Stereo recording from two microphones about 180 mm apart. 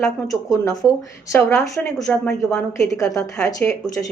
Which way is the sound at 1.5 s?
Centre (ahead or behind).